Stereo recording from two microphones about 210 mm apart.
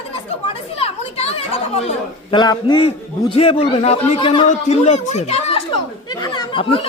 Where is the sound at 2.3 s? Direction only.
20° left (ahead or behind).